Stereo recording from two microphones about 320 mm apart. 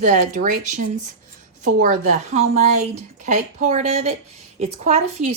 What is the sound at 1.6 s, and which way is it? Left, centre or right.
A woman's voice, right.